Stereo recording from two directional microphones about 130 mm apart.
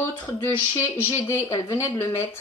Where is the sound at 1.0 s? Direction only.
25° left (ahead or behind).